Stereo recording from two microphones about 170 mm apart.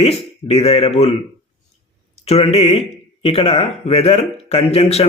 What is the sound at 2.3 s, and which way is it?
Speech, 35° left (ahead or behind).